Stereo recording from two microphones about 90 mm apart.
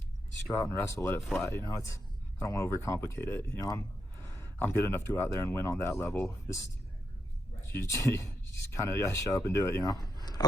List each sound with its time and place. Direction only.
0.5 s speech: 35° left (ahead or behind)
7.7 s speech: 35° left (ahead or behind)
9.8 s a sound: 50° left (ahead or behind)